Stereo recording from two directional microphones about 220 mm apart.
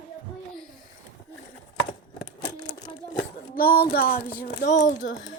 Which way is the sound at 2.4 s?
20° left (ahead or behind).